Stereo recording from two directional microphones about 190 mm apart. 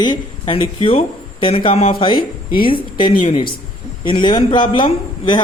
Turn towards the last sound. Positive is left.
turn(degrees=25)  # may be behind; listen again after turning